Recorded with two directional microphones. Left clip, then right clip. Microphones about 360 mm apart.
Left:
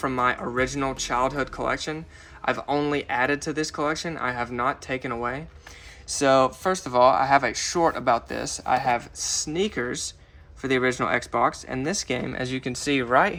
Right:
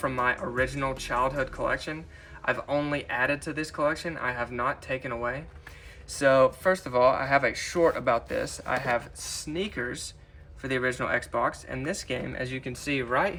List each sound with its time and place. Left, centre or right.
0.0 s speech: centre